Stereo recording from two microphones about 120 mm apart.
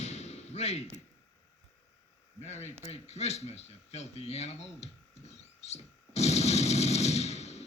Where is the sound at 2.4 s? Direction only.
70° left (ahead or behind).